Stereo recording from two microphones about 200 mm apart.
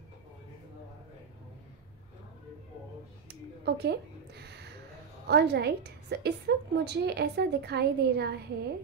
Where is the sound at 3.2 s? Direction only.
55° right (ahead or behind).